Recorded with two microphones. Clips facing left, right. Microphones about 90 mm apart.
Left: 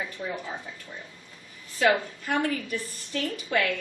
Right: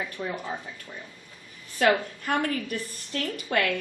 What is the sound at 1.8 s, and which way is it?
A woman's voice, 50° right (ahead or behind).